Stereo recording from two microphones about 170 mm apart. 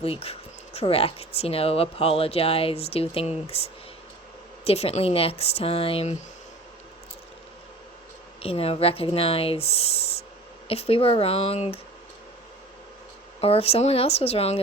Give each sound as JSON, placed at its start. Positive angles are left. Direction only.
{"t": 0.0, "sound": "speech", "side_deg": 35}
{"t": 8.4, "sound": "speech", "side_deg": 35}
{"t": 13.4, "sound": "speech", "side_deg": 35}